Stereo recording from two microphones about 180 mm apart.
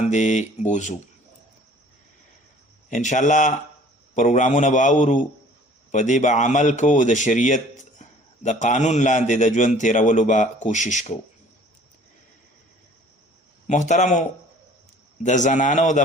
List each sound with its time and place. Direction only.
0.0 s speech: 40° left (ahead or behind)
2.9 s a man's voice: 40° left (ahead or behind)
13.7 s a man's voice: 40° left (ahead or behind)